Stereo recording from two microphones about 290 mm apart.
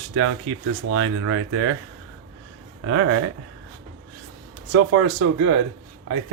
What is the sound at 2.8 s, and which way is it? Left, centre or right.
Speech, right.